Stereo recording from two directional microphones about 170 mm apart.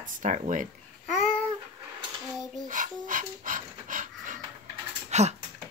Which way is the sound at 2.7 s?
50° right (ahead or behind).